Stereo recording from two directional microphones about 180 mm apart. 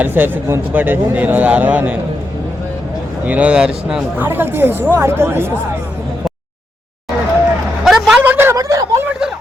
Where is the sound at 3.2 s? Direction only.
10° right (ahead or behind).